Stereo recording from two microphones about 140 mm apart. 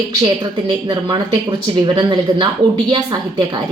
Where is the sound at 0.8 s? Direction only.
30° right (ahead or behind).